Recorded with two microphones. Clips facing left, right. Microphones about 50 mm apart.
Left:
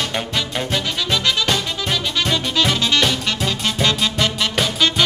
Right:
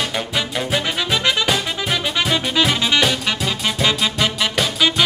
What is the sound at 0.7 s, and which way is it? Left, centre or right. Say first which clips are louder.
Music: right 2 dB; centre.